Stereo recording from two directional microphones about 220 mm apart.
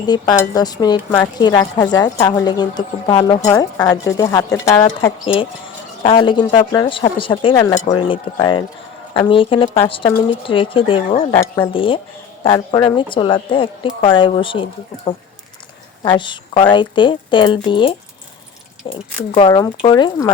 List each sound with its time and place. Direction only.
0.0 s a woman's voice: 20° left (ahead or behind)
11.3 s speech: 10° left (ahead or behind)
11.7 s a woman's voice: 25° left (ahead or behind)
19.3 s a woman's voice: 20° left (ahead or behind)